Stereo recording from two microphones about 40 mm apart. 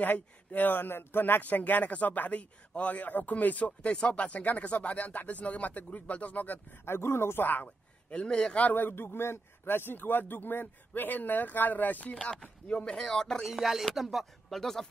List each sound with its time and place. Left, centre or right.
0.0 s a man's voice: left
0.7 s speech: left
1.4 s a man's voice: left
6.8 s speech: left
7.6 s a man's voice: left
8.5 s a man's voice: left
12.6 s speech: left
13.4 s speech: centre
14.5 s speech: centre